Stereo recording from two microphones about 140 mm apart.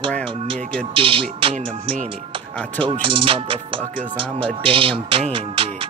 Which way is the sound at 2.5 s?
10° left (ahead or behind).